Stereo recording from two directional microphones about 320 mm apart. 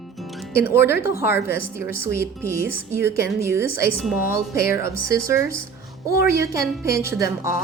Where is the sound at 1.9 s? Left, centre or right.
Left.